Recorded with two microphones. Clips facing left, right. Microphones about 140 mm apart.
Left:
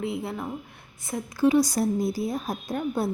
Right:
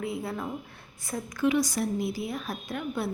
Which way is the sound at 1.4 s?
35° left (ahead or behind).